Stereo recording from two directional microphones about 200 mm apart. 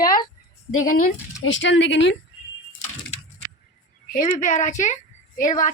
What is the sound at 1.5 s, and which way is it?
Speech, 70° left (ahead or behind).